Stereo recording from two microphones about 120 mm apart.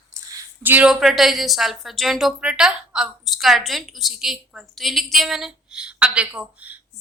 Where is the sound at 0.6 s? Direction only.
15° right (ahead or behind).